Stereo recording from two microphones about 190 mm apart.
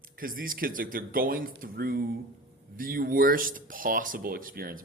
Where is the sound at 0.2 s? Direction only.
50° right (ahead or behind).